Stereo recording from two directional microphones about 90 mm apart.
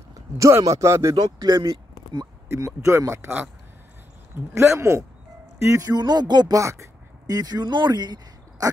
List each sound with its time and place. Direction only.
0.4 s speech: 35° right (ahead or behind)
1.1 s speech: 45° right (ahead or behind)
2.5 s speech: 30° right (ahead or behind)
4.6 s speech: 30° right (ahead or behind)
5.6 s music: 35° right (ahead or behind); by 6.6 s 50° right (ahead or behind)
6.6 s a sound: 35° right (ahead or behind)
7.3 s speech: 50° right (ahead or behind)